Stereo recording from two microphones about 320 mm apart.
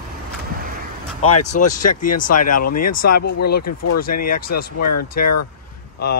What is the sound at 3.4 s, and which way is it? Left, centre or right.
Speech, left.